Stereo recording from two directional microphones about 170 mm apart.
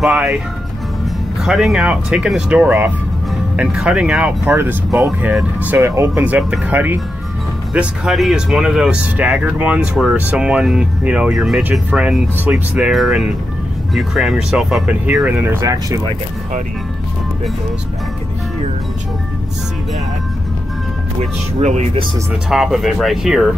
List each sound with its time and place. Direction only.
0.0 s speech: 5° right (ahead or behind)
1.4 s speech: centre (ahead or behind)
15.6 s speech: 20° right (ahead or behind)
21.2 s speech: 40° right (ahead or behind)
22.5 s speech: centre (ahead or behind)